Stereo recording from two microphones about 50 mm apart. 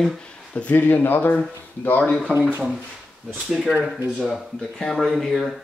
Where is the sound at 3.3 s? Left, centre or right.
Centre.